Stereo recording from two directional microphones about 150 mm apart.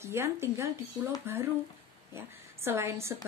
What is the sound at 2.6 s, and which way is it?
Speech, 15° right (ahead or behind).